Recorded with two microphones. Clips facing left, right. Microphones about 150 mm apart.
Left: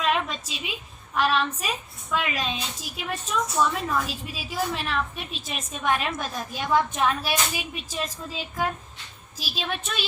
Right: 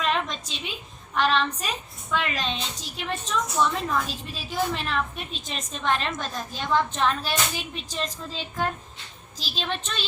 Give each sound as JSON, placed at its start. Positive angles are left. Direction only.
{"t": 0.0, "sound": "a woman's voice", "side_deg": 5}